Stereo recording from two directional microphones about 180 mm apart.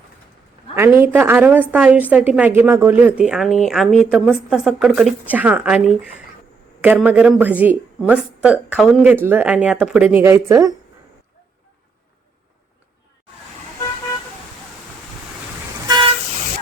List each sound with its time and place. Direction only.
0.8 s a woman's voice: 15° right (ahead or behind)
15.9 s vehicle: 25° right (ahead or behind)